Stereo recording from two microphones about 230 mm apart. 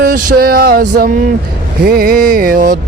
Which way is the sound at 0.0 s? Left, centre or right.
Right.